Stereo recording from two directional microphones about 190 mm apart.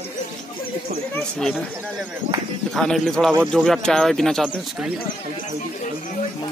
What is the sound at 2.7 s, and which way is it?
Speech, centre (ahead or behind).